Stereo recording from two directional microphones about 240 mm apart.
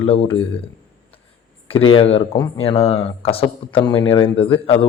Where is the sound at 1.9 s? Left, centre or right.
Left.